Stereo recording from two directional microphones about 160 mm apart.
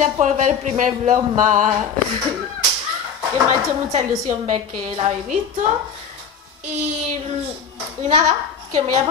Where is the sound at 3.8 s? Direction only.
45° right (ahead or behind).